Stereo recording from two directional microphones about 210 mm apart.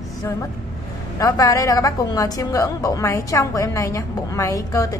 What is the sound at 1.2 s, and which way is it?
A woman's voice, 15° left (ahead or behind).